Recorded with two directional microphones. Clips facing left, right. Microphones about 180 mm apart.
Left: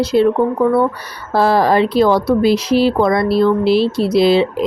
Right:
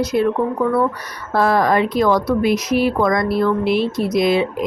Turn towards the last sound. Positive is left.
turn(degrees=30)  # may be behind; listen again after turning